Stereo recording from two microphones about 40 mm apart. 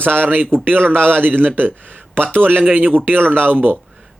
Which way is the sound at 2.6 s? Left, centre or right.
Right.